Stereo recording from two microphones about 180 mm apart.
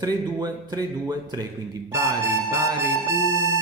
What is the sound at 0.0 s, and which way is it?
Speech, 20° right (ahead or behind).